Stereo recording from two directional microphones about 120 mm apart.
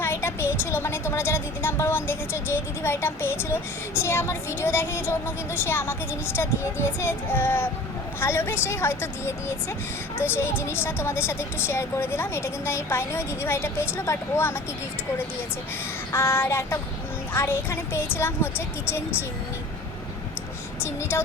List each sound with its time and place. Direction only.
0.0 s a woman's voice: 20° left (ahead or behind)
16.1 s a woman's voice: 20° left (ahead or behind)